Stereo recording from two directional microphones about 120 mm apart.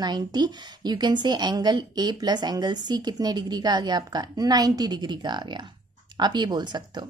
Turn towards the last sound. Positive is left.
turn(degrees=-35)  # may be behind; listen again after turning